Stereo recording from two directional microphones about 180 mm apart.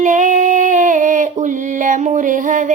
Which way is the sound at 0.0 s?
45° right (ahead or behind).